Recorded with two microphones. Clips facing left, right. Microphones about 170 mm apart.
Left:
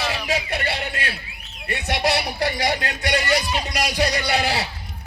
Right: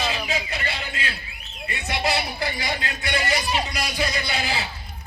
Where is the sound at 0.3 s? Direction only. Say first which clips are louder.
Left 4 dB; 65° left (ahead or behind).